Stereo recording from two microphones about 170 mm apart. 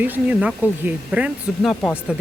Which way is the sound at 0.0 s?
10° right (ahead or behind).